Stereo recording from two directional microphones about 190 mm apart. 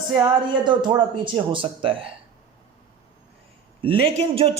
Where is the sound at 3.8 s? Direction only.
30° right (ahead or behind).